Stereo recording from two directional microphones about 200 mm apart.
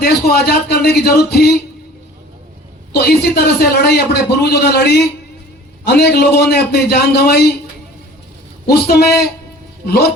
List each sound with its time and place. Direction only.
0.0 s a man's voice: 50° left (ahead or behind)
2.9 s a man's voice: 55° left (ahead or behind)
8.6 s a man's voice: 50° left (ahead or behind)